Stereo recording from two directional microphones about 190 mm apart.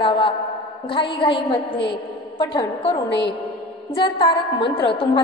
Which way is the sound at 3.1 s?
65° left (ahead or behind).